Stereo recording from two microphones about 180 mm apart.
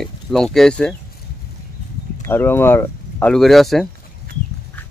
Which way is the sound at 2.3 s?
10° left (ahead or behind).